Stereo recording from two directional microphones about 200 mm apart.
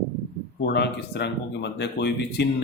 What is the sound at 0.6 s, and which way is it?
Speech, 55° left (ahead or behind).